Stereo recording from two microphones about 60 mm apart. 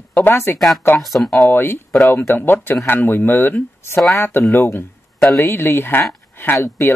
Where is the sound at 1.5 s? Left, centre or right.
Left.